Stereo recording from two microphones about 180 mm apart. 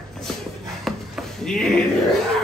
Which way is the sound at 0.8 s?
Centre (ahead or behind).